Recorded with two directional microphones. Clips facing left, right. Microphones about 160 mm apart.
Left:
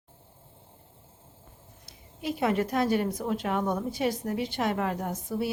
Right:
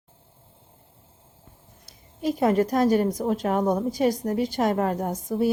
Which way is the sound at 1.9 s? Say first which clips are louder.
Right 6 dB; 40° right (ahead or behind).